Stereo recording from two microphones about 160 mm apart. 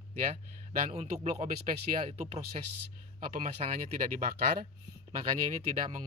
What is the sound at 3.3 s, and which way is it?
Speech, 55° right (ahead or behind).